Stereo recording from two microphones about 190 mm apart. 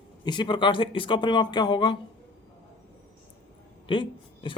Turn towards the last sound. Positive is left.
turn(degrees=25)  # may be behind; listen again after turning